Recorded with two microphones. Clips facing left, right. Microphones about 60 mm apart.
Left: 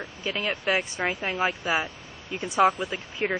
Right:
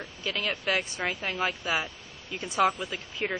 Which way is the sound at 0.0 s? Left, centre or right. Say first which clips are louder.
Left 2 dB; left.